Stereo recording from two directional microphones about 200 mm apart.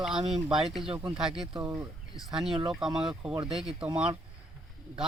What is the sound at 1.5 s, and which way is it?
Speech, 20° right (ahead or behind).